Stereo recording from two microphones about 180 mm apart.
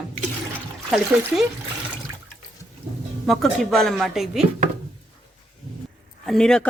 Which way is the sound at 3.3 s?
Centre (ahead or behind).